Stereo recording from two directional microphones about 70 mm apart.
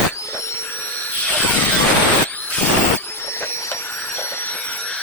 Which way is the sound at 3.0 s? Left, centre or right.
Left.